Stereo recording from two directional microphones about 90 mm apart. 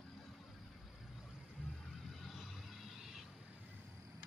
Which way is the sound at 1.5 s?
5° left (ahead or behind).